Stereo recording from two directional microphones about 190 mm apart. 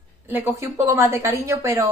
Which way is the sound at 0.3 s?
15° right (ahead or behind).